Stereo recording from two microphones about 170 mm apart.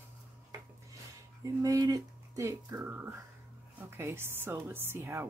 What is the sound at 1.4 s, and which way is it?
Speech, 20° right (ahead or behind).